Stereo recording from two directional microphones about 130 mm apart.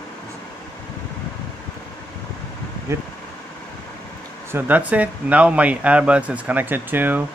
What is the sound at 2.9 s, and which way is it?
Speech, 20° right (ahead or behind).